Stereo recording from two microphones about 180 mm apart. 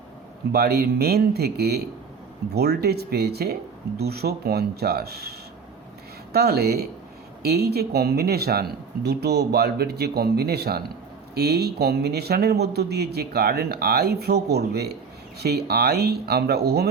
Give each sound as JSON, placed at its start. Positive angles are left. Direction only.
{"t": 0.5, "sound": "speech", "side_deg": -60}
{"t": 6.3, "sound": "speech", "side_deg": -60}